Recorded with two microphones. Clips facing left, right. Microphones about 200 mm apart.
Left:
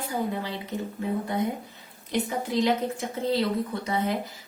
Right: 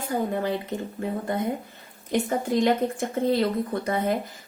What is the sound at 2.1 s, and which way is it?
A woman's voice, 50° right (ahead or behind).